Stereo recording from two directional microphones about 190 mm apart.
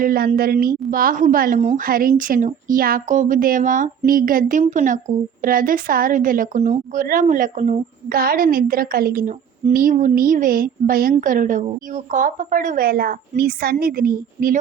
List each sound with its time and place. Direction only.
0.0 s a woman's voice: 50° right (ahead or behind)